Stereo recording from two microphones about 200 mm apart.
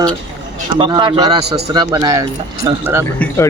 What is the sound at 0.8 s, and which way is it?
A man's voice, 20° right (ahead or behind).